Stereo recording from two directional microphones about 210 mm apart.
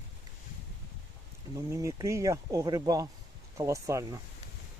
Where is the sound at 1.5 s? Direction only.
15° right (ahead or behind).